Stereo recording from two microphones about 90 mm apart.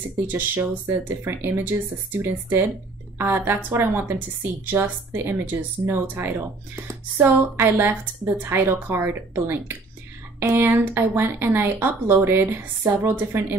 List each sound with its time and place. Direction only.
0.3 s a woman's voice: 25° right (ahead or behind)